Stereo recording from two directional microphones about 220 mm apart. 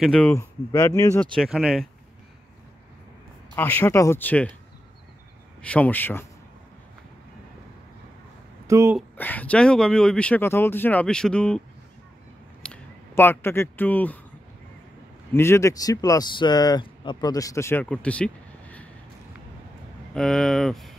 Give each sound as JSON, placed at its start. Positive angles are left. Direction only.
{"t": 0.0, "sound": "speech", "side_deg": 5}
{"t": 3.5, "sound": "speech", "side_deg": 10}
{"t": 5.6, "sound": "speech", "side_deg": 5}
{"t": 8.6, "sound": "speech", "side_deg": -15}
{"t": 9.1, "sound": "speech", "side_deg": 10}
{"t": 12.6, "sound": "speech", "side_deg": 10}
{"t": 15.3, "sound": "speech", "side_deg": 10}
{"t": 18.0, "sound": "vehicle", "side_deg": 5}
{"t": 20.2, "sound": "speech", "side_deg": 5}